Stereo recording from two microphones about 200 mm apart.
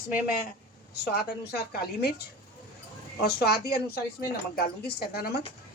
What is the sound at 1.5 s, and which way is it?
Speech, 50° left (ahead or behind).